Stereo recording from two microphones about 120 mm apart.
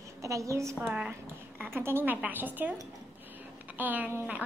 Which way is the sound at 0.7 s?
10° right (ahead or behind).